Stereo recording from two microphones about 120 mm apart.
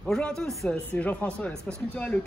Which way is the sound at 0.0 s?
5° left (ahead or behind).